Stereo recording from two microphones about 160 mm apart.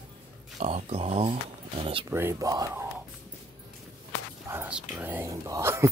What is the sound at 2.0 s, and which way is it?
Speech, 15° right (ahead or behind).